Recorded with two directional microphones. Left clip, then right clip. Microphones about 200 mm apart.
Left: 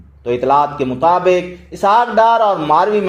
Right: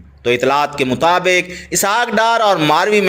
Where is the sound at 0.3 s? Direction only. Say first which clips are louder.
Left 1 dB; 20° right (ahead or behind).